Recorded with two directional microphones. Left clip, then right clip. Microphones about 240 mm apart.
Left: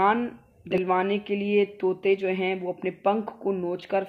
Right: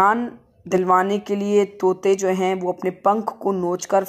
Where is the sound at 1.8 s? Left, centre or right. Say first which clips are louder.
Right 7 dB; right.